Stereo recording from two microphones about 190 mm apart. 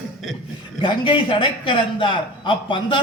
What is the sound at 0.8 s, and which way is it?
A man's voice, 25° left (ahead or behind).